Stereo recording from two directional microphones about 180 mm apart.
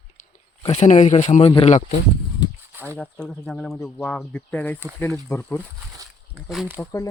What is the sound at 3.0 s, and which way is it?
Speech, 5° left (ahead or behind).